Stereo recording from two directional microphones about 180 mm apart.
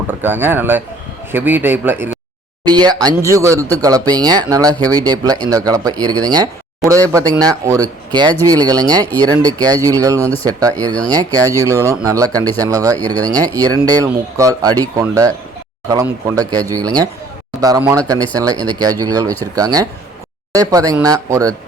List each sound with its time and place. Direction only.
0.1 s speech: 10° right (ahead or behind)
2.6 s speech: 25° right (ahead or behind)